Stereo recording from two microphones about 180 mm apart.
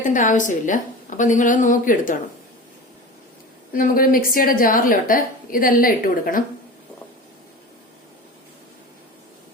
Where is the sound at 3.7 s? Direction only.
50° left (ahead or behind).